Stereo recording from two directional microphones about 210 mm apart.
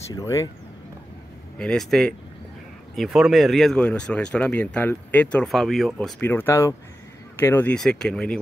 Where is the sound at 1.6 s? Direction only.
5° left (ahead or behind).